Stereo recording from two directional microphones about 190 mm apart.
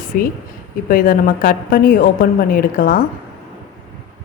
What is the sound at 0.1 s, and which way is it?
A woman's voice, 50° left (ahead or behind).